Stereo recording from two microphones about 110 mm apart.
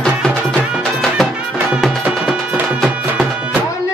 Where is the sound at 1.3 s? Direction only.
10° right (ahead or behind).